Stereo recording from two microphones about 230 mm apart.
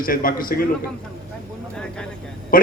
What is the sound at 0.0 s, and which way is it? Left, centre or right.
Speech, left.